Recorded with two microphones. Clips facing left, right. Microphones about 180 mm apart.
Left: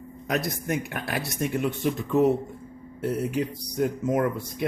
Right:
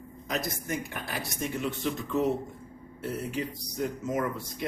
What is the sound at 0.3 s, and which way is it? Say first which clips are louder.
Speech: left 5 dB; 65° left (ahead or behind).